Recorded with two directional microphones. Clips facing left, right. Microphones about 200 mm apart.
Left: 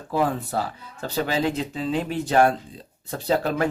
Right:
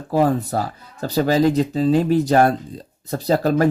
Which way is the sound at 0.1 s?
40° right (ahead or behind).